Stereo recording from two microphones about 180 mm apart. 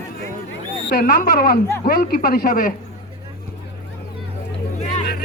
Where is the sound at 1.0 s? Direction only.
60° left (ahead or behind).